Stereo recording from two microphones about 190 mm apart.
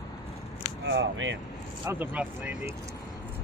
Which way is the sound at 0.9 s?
75° right (ahead or behind).